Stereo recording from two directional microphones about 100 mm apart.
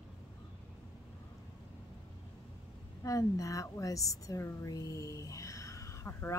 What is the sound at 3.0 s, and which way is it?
Speech, 35° left (ahead or behind).